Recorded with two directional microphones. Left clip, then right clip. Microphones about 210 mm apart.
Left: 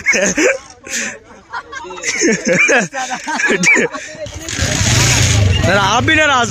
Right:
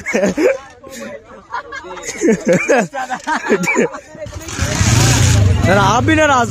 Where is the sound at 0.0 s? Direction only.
10° right (ahead or behind).